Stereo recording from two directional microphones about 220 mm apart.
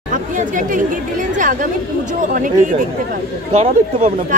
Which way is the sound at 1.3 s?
35° right (ahead or behind).